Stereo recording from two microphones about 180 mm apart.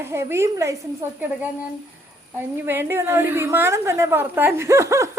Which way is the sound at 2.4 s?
10° right (ahead or behind).